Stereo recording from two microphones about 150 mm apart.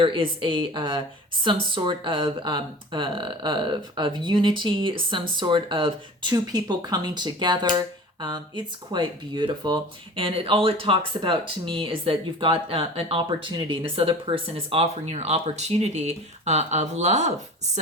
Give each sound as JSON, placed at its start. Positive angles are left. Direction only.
{"t": 0.0, "sound": "speech", "side_deg": -35}